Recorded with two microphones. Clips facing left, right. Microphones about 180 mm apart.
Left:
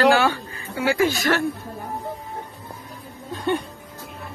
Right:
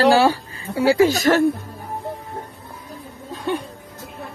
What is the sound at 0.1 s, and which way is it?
Speech, 35° right (ahead or behind).